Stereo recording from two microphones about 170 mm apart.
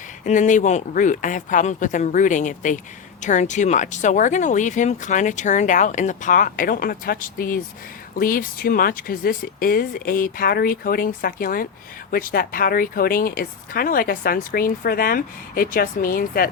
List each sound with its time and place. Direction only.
0.3 s speech: 45° left (ahead or behind)